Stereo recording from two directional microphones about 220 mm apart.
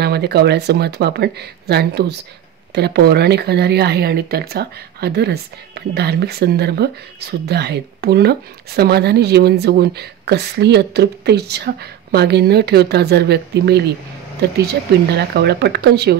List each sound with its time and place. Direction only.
0.0 s speech: 45° right (ahead or behind)